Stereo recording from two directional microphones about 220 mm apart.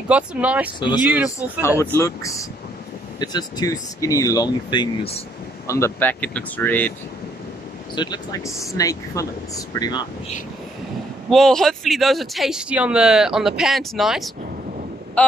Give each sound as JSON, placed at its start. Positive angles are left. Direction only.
{"t": 0.1, "sound": "speech", "side_deg": -5}
{"t": 0.7, "sound": "speech", "side_deg": 20}
{"t": 1.0, "sound": "speech", "side_deg": -5}
{"t": 1.8, "sound": "speech", "side_deg": 10}
{"t": 5.7, "sound": "speech", "side_deg": 15}
{"t": 7.9, "sound": "speech", "side_deg": 20}
{"t": 11.2, "sound": "speech", "side_deg": 0}